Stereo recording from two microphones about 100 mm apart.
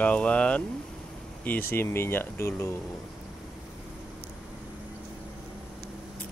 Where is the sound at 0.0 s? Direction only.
10° left (ahead or behind).